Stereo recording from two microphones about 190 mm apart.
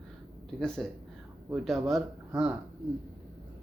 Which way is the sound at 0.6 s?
5° left (ahead or behind).